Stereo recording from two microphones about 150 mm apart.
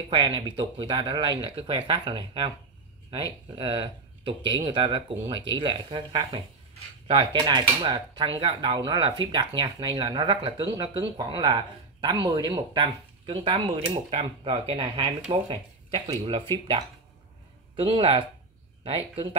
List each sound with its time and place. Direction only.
0.1 s speech: 30° right (ahead or behind)
3.5 s speech: 35° right (ahead or behind)
17.7 s speech: 35° right (ahead or behind)